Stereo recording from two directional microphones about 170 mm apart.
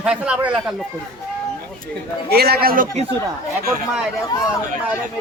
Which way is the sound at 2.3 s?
65° right (ahead or behind).